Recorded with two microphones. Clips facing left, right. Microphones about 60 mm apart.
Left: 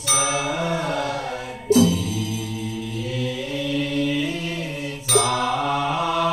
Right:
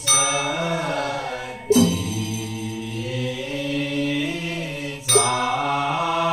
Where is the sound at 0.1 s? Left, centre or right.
Centre.